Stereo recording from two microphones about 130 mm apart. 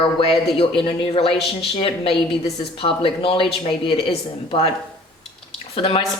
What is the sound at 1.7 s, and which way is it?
Speech, 45° left (ahead or behind).